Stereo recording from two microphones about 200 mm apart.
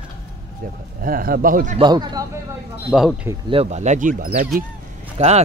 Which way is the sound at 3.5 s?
30° right (ahead or behind).